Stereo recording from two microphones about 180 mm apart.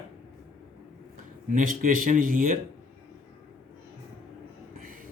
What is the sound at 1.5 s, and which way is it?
Speech, 50° right (ahead or behind).